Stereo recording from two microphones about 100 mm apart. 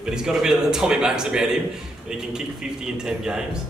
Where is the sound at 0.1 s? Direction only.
5° right (ahead or behind).